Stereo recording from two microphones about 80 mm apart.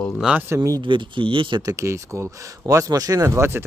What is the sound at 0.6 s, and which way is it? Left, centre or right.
Speech, right.